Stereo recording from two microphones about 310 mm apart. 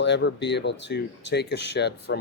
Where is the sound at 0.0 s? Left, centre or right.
Left.